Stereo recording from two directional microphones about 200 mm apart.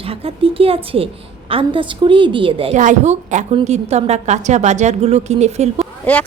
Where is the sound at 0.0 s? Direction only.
30° right (ahead or behind).